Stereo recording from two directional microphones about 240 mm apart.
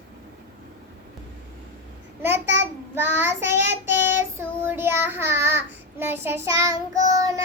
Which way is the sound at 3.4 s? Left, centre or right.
Right.